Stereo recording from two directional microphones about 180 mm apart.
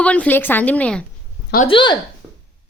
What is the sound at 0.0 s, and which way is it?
A woman's voice, 5° left (ahead or behind).